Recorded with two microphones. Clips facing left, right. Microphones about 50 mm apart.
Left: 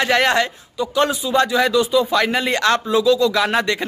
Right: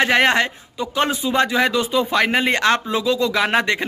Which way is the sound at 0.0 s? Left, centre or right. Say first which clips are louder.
Right 1 dB; right.